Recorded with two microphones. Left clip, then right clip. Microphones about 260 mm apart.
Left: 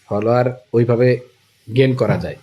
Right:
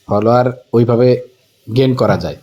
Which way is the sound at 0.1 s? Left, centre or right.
Centre.